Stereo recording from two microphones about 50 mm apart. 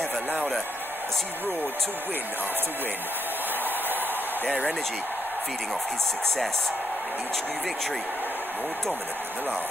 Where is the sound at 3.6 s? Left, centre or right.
Right.